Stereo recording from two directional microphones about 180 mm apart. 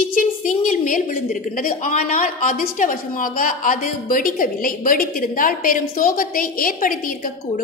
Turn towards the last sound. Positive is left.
turn(degrees=50)  # may be behind; listen again after turning